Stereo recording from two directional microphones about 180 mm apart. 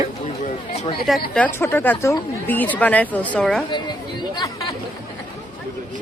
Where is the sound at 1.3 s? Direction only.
10° left (ahead or behind).